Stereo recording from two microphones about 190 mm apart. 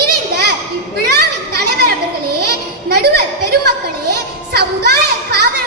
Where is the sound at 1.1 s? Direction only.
55° right (ahead or behind).